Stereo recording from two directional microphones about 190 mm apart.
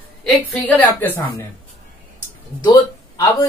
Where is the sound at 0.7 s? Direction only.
10° left (ahead or behind).